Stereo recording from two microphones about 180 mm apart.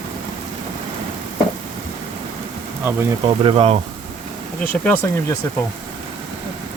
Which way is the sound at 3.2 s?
30° right (ahead or behind).